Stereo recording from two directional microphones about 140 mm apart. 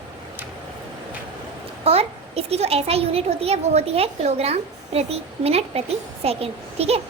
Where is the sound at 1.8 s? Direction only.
45° right (ahead or behind).